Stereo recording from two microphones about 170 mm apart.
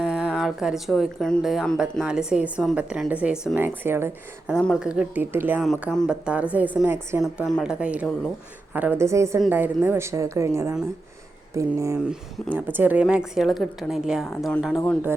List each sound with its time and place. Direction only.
0.0 s speech: centre (ahead or behind)
4.5 s speech: centre (ahead or behind)